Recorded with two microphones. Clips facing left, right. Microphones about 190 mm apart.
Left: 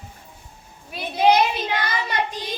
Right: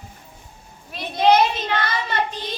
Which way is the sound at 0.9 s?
10° left (ahead or behind).